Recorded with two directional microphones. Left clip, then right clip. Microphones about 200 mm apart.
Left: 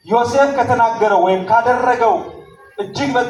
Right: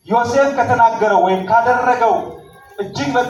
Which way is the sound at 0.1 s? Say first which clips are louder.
Left 1 dB; 15° right (ahead or behind).